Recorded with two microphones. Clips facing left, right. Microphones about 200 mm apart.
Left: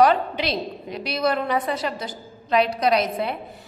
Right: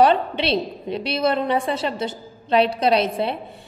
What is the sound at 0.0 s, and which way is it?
A woman's voice, 30° right (ahead or behind).